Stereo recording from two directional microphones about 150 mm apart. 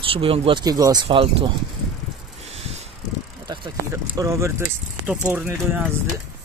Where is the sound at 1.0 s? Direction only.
35° right (ahead or behind).